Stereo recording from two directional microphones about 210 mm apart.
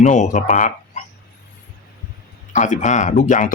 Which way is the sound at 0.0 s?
35° left (ahead or behind).